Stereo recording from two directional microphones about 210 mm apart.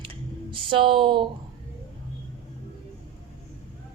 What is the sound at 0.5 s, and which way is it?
Speech, 25° right (ahead or behind).